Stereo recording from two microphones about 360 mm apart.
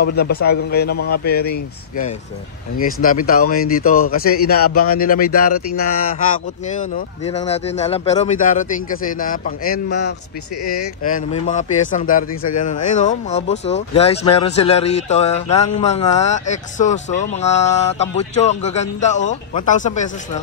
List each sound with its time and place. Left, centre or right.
0.0 s music: left
2.8 s music: left
6.3 s speech: centre
9.2 s music: left
10.6 s speech: left
11.1 s music: left
12.6 s speech: left
17.3 s music: centre